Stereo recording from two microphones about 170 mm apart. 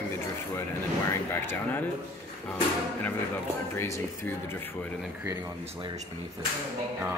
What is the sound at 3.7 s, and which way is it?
Speech, 15° left (ahead or behind).